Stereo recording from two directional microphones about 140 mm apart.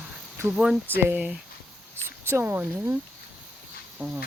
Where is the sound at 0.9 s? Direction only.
15° right (ahead or behind).